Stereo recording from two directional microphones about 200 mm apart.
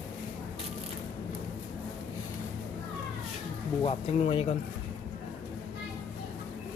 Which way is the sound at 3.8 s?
25° left (ahead or behind).